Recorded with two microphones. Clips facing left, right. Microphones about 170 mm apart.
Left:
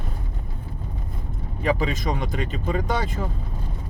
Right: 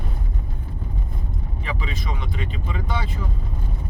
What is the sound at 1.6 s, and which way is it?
Speech, 45° left (ahead or behind).